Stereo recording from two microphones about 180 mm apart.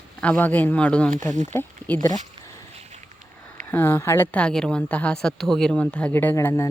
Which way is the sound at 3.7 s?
10° left (ahead or behind).